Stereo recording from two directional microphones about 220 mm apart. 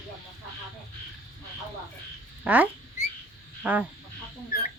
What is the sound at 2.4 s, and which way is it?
Speech, 5° right (ahead or behind).